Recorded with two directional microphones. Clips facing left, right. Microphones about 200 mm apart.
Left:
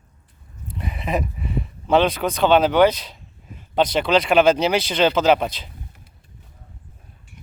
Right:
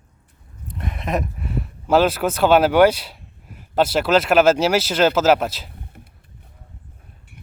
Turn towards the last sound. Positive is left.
turn(degrees=-55)  # may be behind; listen again after turning